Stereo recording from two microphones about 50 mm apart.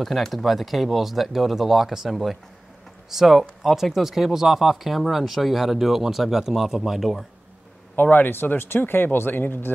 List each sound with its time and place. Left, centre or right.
0.0 s speech: centre
7.9 s speech: left